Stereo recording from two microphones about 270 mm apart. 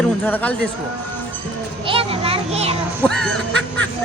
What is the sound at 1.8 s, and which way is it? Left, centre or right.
Children playing, right.